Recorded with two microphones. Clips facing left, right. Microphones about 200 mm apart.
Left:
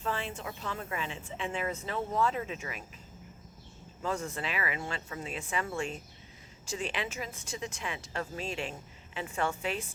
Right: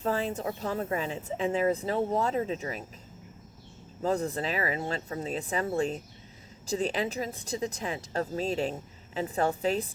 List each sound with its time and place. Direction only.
0.0 s a woman's voice: 40° right (ahead or behind)
4.0 s a woman's voice: 35° right (ahead or behind)